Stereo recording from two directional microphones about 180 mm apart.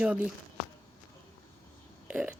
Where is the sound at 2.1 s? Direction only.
10° right (ahead or behind).